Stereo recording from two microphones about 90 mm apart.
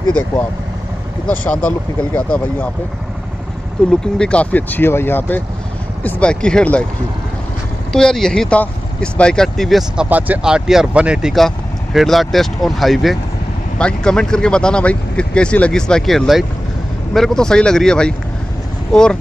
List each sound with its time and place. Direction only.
1.2 s speech: 15° left (ahead or behind)
3.9 s speech: 10° left (ahead or behind)
7.9 s speech: 5° left (ahead or behind)
10.0 s speech: 20° right (ahead or behind)
11.3 s speech: centre (ahead or behind)